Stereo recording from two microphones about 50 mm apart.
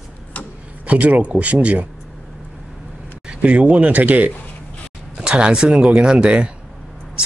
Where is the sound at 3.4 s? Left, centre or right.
Right.